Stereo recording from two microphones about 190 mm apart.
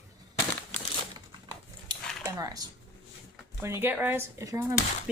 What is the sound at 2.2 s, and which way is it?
A woman's voice, 20° right (ahead or behind).